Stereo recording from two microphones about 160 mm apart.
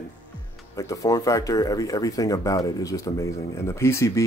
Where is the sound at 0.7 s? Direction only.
20° left (ahead or behind).